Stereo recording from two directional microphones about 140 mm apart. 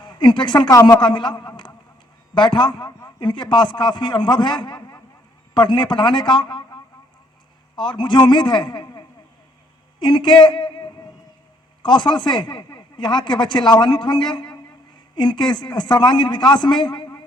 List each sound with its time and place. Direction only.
0.0 s speech: 35° left (ahead or behind)
7.8 s speech: 35° left (ahead or behind)